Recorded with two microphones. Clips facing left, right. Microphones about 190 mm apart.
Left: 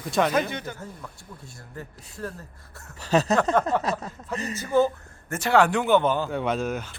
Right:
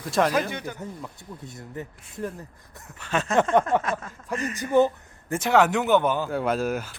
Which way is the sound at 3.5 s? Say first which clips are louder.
Right 1 dB; 15° right (ahead or behind).